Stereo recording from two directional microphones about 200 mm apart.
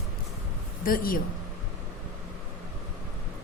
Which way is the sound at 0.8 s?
45° left (ahead or behind).